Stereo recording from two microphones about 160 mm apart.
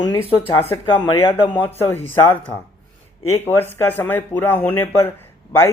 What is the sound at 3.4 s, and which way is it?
Speech, 15° left (ahead or behind).